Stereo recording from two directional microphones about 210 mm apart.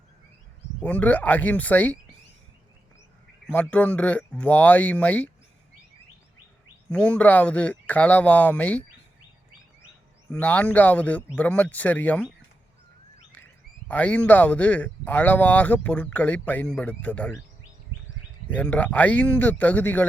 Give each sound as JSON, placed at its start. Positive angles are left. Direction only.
{"t": 0.9, "sound": "speech", "side_deg": 10}
{"t": 3.4, "sound": "speech", "side_deg": 5}
{"t": 6.9, "sound": "speech", "side_deg": 5}
{"t": 10.4, "sound": "speech", "side_deg": 5}
{"t": 13.3, "sound": "speech", "side_deg": 10}
{"t": 18.4, "sound": "speech", "side_deg": 5}